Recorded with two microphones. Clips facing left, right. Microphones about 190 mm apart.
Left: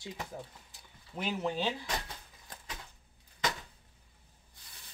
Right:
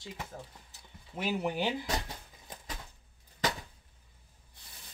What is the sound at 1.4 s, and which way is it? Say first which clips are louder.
Speech: left 1 dB; 15° right (ahead or behind).